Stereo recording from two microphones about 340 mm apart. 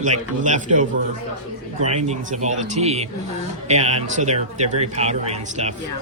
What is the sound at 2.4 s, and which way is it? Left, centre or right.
A man's voice, right.